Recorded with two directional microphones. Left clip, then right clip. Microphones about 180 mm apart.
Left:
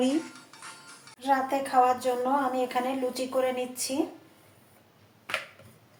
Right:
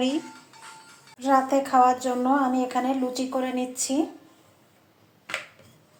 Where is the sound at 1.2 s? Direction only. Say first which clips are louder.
Right 5 dB; 40° right (ahead or behind).